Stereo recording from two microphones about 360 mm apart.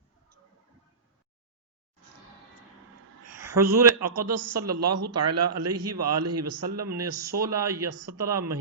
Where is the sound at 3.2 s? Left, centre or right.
Right.